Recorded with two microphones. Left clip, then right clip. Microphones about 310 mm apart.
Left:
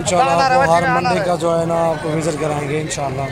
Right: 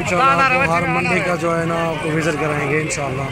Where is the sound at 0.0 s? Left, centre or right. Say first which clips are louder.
Even; left.